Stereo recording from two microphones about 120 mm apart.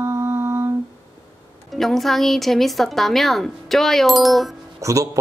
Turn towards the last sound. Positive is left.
turn(degrees=-25)  # may be behind; listen again after turning